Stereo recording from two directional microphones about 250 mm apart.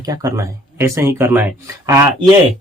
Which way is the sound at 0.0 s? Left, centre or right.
Centre.